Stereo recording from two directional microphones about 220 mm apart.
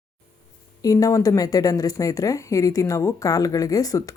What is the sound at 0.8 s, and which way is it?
A woman's voice, 15° left (ahead or behind).